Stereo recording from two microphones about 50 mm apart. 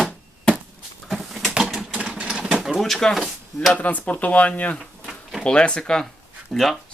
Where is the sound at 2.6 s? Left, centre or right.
Centre.